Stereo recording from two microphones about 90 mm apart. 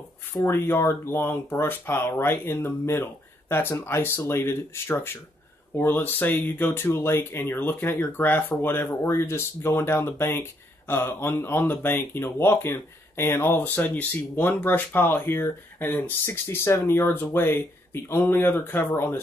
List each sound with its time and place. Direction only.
0.5 s speech: 30° left (ahead or behind)